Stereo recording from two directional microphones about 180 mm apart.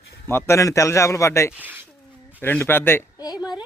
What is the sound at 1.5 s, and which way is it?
Speech, 10° right (ahead or behind).